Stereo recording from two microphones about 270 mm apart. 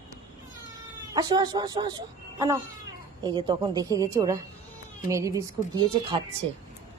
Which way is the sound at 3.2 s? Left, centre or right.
Centre.